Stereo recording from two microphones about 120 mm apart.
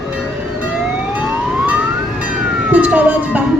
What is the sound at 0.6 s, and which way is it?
Emergency vehicle, 15° right (ahead or behind).